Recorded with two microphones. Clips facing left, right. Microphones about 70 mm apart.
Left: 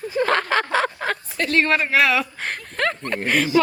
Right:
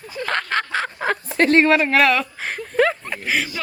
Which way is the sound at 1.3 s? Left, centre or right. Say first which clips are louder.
Right 9 dB; right.